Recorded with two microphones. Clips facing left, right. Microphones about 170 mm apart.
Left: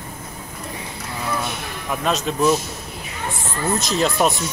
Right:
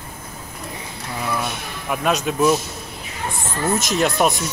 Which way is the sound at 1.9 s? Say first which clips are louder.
Right 2 dB; 5° right (ahead or behind).